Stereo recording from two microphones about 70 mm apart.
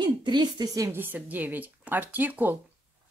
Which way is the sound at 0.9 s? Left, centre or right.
Right.